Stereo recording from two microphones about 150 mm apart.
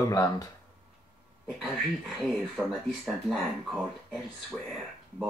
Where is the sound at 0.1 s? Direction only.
25° left (ahead or behind).